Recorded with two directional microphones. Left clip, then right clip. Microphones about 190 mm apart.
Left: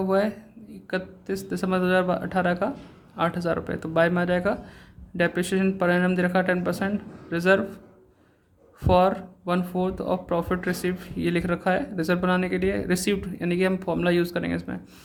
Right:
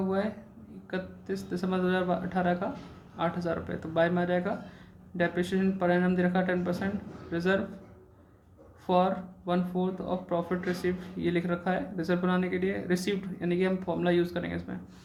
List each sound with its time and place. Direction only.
0.1 s speech: 40° left (ahead or behind)
8.8 s speech: 40° left (ahead or behind)